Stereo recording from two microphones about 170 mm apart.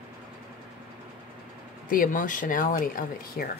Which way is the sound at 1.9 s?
55° left (ahead or behind).